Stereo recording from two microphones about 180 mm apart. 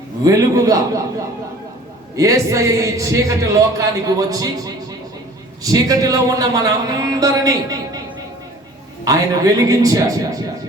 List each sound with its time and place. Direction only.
0.3 s a man's voice: 20° right (ahead or behind)
2.1 s a man's voice: 15° right (ahead or behind)
9.0 s a man's voice: 20° right (ahead or behind)